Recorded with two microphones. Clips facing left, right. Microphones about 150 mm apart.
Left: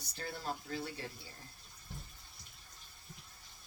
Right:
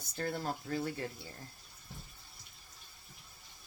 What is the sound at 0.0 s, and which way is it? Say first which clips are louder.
Speech: right 6 dB; 50° right (ahead or behind).